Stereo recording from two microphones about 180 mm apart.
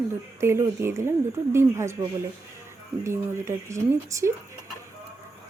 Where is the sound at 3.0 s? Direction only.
15° right (ahead or behind).